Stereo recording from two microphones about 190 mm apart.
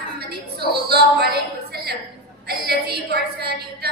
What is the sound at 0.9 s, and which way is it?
A woman's voice, 55° right (ahead or behind).